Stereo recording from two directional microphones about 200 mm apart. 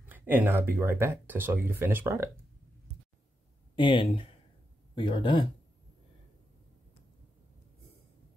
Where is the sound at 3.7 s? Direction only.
25° left (ahead or behind).